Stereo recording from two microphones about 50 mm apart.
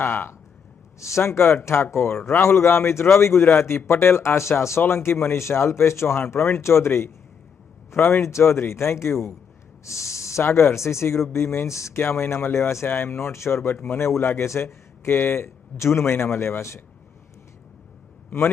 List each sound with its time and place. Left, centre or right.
0.0 s speech: left
0.9 s speech: left
4.8 s speech: left
6.6 s speech: left
7.9 s a man's voice: left
8.2 s speech: left
9.8 s speech: left
11.9 s speech: left